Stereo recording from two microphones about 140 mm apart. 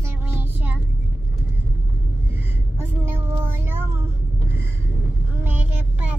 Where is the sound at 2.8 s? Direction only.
15° right (ahead or behind).